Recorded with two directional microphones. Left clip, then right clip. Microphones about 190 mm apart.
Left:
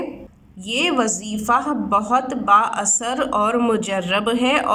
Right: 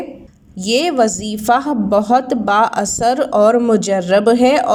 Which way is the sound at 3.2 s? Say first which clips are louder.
Right 6 dB; 40° right (ahead or behind).